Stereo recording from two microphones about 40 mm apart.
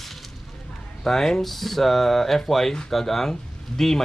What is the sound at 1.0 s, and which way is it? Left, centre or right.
Speech, centre.